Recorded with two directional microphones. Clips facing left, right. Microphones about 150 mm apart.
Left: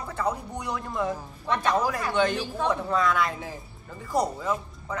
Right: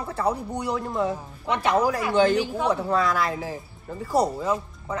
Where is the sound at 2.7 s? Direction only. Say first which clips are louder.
Even; 35° right (ahead or behind).